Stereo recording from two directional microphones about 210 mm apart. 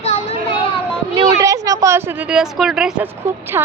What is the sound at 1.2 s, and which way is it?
A woman's voice, 15° right (ahead or behind).